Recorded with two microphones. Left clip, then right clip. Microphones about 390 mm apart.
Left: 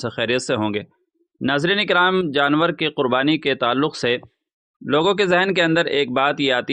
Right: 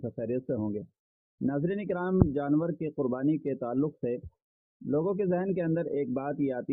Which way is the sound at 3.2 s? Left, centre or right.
Centre.